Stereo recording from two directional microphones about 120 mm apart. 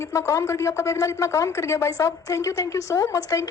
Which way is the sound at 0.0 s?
25° left (ahead or behind).